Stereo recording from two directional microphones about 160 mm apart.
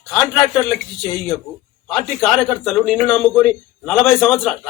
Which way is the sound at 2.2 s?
Centre (ahead or behind).